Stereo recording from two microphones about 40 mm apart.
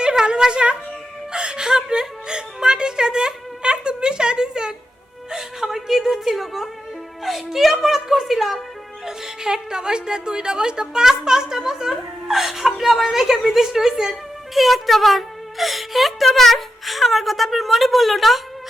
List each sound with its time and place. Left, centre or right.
0.0 s a sound: centre
1.3 s whimper: right; by 6.7 s centre
7.3 s a woman's voice: centre